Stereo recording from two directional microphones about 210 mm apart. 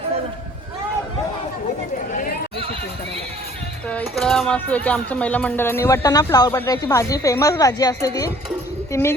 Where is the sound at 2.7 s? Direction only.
25° right (ahead or behind).